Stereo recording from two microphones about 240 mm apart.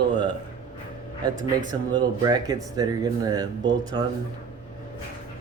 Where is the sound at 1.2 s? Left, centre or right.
Centre.